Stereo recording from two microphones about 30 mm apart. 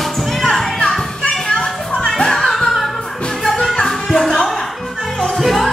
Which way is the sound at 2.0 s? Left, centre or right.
Centre.